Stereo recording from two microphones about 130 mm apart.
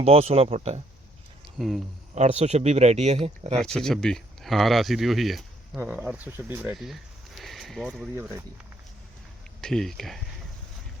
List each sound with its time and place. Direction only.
0.0 s speech: 50° right (ahead or behind)
1.5 s speech: centre (ahead or behind)
2.1 s speech: 55° right (ahead or behind)
3.6 s speech: 5° left (ahead or behind)
5.8 s speech: 10° right (ahead or behind)
6.7 s a sound: centre (ahead or behind)
8.1 s speech: 20° right (ahead or behind)
9.6 s speech: 5° left (ahead or behind)